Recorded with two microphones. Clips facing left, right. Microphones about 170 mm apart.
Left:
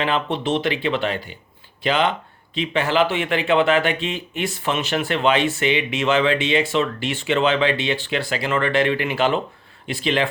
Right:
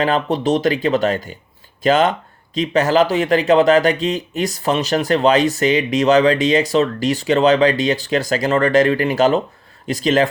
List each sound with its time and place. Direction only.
0.0 s speech: 40° right (ahead or behind)